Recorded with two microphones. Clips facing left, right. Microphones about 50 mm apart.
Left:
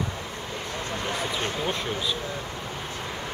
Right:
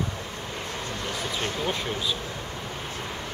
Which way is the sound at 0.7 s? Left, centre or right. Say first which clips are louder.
Left 3 dB; left.